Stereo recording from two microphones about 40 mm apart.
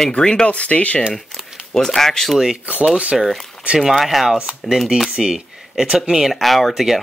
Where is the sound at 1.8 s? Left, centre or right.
Centre.